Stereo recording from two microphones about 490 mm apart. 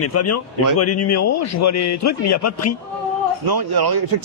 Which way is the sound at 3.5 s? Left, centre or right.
Right.